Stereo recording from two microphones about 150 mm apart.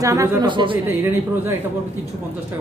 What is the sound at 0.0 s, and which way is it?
Speech, 20° right (ahead or behind).